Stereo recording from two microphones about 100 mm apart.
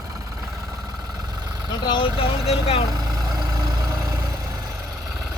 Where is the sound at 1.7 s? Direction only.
50° left (ahead or behind).